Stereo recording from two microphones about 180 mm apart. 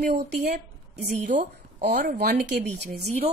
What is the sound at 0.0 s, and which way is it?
A woman's voice, 60° right (ahead or behind).